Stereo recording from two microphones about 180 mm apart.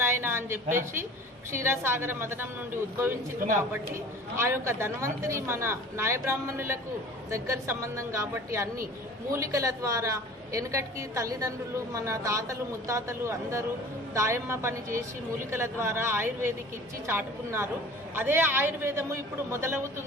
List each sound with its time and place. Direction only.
0.0 s a sound: 15° right (ahead or behind)
1.5 s a woman's voice: 15° right (ahead or behind)
4.4 s a woman's voice: 15° right (ahead or behind)
9.3 s a woman's voice: 15° right (ahead or behind)